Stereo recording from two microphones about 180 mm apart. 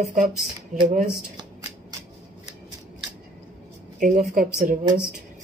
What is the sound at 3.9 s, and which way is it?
Speech, 45° right (ahead or behind).